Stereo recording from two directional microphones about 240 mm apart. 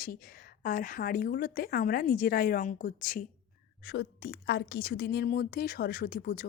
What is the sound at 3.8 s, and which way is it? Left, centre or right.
A woman's voice, left.